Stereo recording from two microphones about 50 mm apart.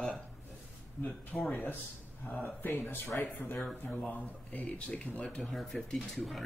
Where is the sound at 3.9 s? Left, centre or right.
Left.